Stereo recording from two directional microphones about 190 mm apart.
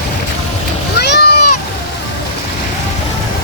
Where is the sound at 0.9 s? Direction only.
60° left (ahead or behind).